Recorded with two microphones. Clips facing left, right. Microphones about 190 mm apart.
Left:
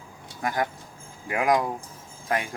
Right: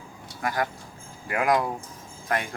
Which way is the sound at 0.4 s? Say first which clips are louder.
Even; 20° left (ahead or behind).